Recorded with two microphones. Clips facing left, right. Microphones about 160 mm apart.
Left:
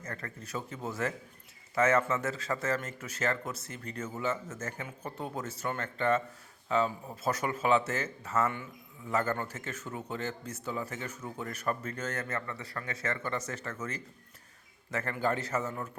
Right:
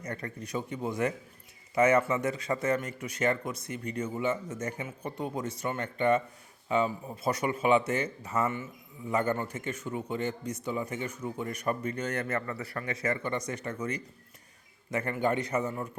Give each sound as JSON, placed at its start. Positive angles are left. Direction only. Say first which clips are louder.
{"t": 0.0, "sound": "a man's voice", "louder": "right 4 dB", "side_deg": -15}